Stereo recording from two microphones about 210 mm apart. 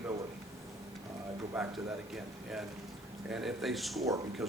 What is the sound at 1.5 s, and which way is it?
A man's voice, centre (ahead or behind).